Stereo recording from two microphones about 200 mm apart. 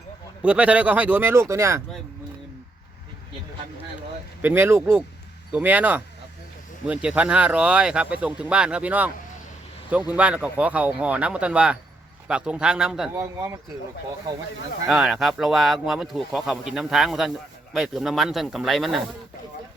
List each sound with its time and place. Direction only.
0.4 s speech: 5° right (ahead or behind)
4.4 s speech: 10° right (ahead or behind)
10.1 s speech: 5° right (ahead or behind)
13.1 s speech: 15° right (ahead or behind)
14.8 s speech: centre (ahead or behind)